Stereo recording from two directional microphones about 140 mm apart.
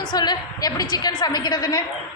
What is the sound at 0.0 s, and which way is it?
A woman's voice, 30° left (ahead or behind).